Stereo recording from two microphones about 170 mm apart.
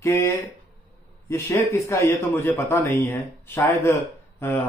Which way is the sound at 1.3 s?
15° left (ahead or behind).